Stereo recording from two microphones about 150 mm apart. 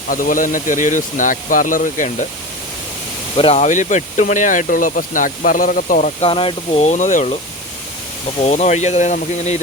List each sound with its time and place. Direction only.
0.1 s speech: 65° left (ahead or behind)
3.3 s speech: 40° left (ahead or behind); by 6.1 s 65° left (ahead or behind)
6.1 s speech: 35° left (ahead or behind); by 7.3 s 55° left (ahead or behind)
8.4 s speech: 50° left (ahead or behind)